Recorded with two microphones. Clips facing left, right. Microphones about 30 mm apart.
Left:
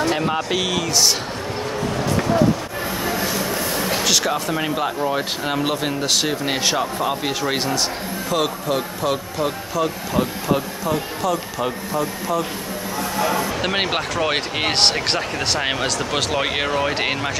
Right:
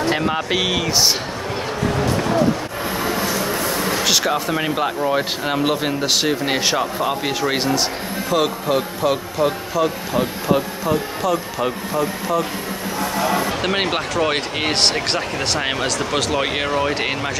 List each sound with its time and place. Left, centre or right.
0.1 s speech: centre
4.0 s speech: centre
13.6 s speech: centre